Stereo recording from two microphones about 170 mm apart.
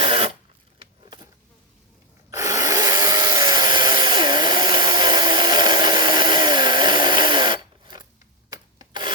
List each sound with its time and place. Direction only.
0.0 s a sound: 35° right (ahead or behind)
0.8 s vehicle: 25° right (ahead or behind)
2.3 s wood: 20° right (ahead or behind)
8.8 s rub: 25° right (ahead or behind)